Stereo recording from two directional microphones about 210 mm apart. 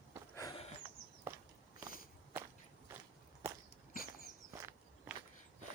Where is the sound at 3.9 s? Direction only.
45° left (ahead or behind).